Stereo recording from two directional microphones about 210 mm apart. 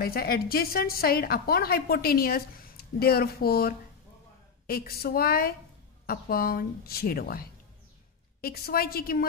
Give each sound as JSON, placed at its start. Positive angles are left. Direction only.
{"t": 0.0, "sound": "a woman's voice", "side_deg": 45}